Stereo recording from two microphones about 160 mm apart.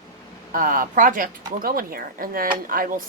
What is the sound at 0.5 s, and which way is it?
Speech, 60° right (ahead or behind).